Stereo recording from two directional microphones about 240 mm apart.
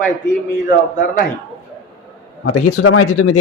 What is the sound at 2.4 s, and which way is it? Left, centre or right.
Speech, left.